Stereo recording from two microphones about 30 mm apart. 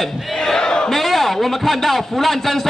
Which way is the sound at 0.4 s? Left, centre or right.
Left.